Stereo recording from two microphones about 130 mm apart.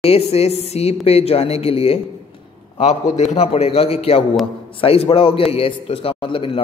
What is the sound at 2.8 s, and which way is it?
A man's voice, 60° left (ahead or behind).